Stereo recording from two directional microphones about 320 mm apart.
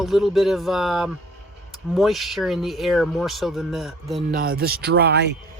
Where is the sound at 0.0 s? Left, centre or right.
Centre.